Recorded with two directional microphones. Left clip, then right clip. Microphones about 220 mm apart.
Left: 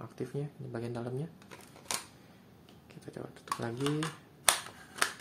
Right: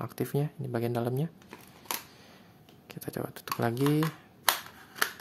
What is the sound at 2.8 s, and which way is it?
Speech, 50° right (ahead or behind).